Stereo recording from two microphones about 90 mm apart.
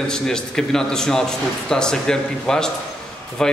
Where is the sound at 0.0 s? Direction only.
5° left (ahead or behind).